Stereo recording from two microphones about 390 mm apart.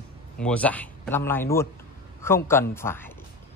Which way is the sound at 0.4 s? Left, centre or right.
Centre.